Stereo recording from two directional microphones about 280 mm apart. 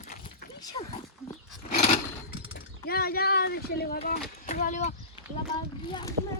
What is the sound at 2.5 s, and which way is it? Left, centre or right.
Speech, left.